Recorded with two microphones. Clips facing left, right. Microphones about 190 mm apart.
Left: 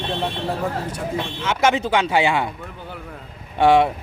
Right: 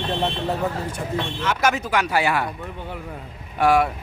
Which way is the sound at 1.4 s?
25° left (ahead or behind).